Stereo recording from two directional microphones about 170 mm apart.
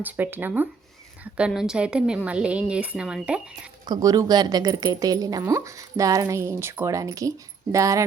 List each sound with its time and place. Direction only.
0.0 s a woman's voice: 10° right (ahead or behind)
3.8 s speech: 25° right (ahead or behind)